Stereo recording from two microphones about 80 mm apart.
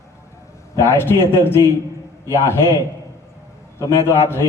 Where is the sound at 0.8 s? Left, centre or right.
Left.